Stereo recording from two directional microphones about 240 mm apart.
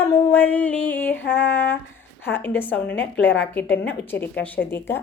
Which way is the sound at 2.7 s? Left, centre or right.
Left.